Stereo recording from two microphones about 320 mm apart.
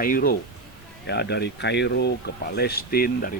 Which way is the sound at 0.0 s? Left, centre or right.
Left.